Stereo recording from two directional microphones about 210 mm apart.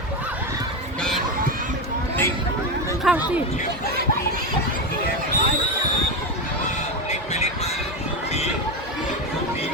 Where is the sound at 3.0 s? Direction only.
5° right (ahead or behind).